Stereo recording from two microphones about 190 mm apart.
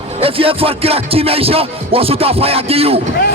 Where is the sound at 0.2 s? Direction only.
30° right (ahead or behind).